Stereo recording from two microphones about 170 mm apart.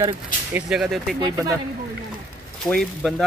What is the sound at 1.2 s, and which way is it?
Speech, 20° right (ahead or behind).